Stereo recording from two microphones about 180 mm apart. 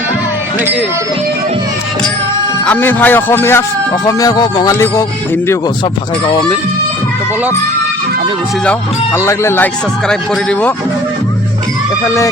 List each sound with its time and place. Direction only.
2.6 s speech: 10° left (ahead or behind)
8.6 s speech: 10° left (ahead or behind)
12.0 s speech: 15° left (ahead or behind)